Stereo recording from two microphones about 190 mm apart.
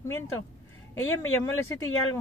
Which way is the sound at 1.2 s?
15° left (ahead or behind).